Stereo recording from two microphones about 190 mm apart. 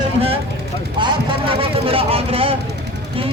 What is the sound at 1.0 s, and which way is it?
Speech, 25° right (ahead or behind).